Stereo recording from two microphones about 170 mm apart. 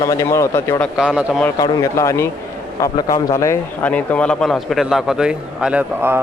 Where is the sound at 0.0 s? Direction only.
20° left (ahead or behind).